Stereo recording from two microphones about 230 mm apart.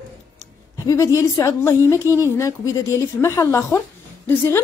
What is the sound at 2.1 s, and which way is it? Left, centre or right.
Speech, centre.